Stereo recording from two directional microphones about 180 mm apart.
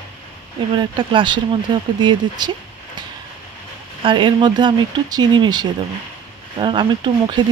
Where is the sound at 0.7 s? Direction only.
25° right (ahead or behind).